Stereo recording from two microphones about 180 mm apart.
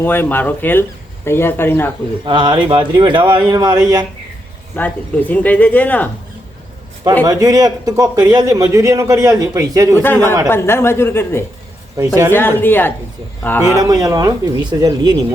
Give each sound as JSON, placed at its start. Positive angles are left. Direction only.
{"t": 0.0, "sound": "speech", "side_deg": 10}
{"t": 2.2, "sound": "a man's voice", "side_deg": -25}
{"t": 4.7, "sound": "speech", "side_deg": 10}
{"t": 7.3, "sound": "a man's voice", "side_deg": -20}
{"t": 10.0, "sound": "speech", "side_deg": 10}
{"t": 11.9, "sound": "a man's voice", "side_deg": -20}
{"t": 12.3, "sound": "speech", "side_deg": 10}
{"t": 13.7, "sound": "a man's voice", "side_deg": -20}